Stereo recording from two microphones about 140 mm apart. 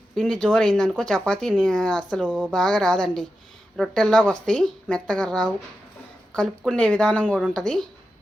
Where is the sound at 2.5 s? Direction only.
5° left (ahead or behind).